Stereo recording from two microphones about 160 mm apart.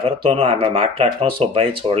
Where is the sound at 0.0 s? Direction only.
35° right (ahead or behind).